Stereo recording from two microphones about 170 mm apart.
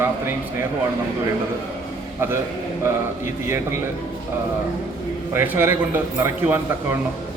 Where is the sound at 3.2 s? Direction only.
15° right (ahead or behind).